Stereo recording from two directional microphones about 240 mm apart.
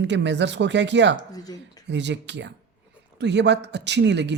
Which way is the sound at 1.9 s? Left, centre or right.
Right.